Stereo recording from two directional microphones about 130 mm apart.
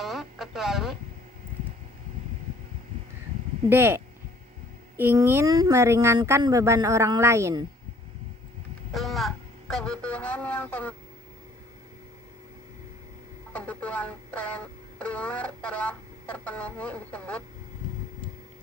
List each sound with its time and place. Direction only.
0.0 s a sound: centre (ahead or behind)
3.7 s a child's voice: 15° right (ahead or behind)
5.5 s speech: 30° right (ahead or behind)
8.9 s speech: centre (ahead or behind)
13.5 s speech: 10° left (ahead or behind)